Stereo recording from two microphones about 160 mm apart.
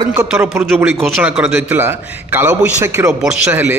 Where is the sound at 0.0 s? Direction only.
25° right (ahead or behind).